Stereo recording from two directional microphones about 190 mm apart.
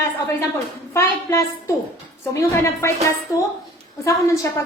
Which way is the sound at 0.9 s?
15° left (ahead or behind).